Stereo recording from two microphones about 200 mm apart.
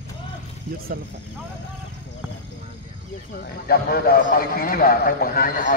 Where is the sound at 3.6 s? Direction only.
50° left (ahead or behind).